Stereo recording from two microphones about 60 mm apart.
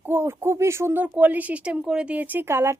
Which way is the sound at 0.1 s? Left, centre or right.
Right.